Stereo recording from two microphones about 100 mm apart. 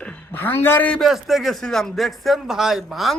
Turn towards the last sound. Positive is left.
turn(degrees=0)  # may be behind; listen again after turning